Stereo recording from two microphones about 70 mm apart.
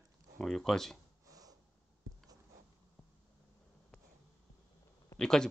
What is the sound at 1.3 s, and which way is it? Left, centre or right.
Snort, right.